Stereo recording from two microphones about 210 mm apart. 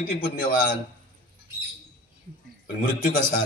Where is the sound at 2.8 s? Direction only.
40° left (ahead or behind).